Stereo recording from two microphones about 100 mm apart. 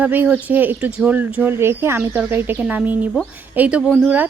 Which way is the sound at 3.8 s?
Centre (ahead or behind).